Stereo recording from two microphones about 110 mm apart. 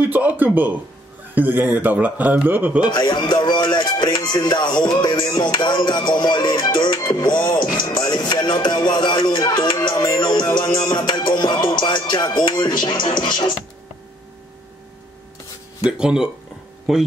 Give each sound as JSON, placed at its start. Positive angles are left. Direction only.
{"t": 0.0, "sound": "speech", "side_deg": -15}
{"t": 2.8, "sound": "music", "side_deg": 40}
{"t": 15.9, "sound": "speech", "side_deg": -5}